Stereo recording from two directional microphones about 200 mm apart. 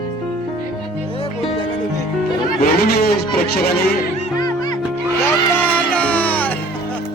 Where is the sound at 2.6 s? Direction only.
45° left (ahead or behind).